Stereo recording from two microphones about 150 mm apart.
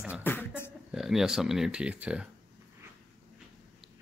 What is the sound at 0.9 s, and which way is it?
Speech, 5° right (ahead or behind).